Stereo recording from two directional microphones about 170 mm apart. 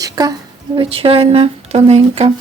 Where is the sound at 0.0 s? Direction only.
20° right (ahead or behind).